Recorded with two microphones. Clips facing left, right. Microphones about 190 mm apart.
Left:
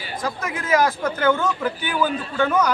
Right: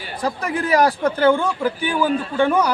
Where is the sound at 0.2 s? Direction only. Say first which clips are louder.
Right 6 dB; 35° right (ahead or behind).